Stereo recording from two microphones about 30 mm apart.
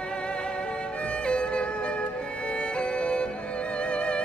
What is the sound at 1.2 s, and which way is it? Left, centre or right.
Music, left.